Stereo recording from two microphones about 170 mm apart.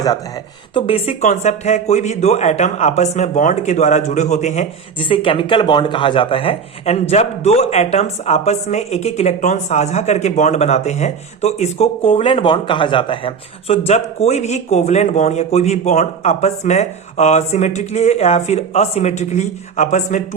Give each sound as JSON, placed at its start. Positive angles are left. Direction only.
{"t": 0.7, "sound": "speech", "side_deg": 35}
{"t": 4.9, "sound": "speech", "side_deg": 30}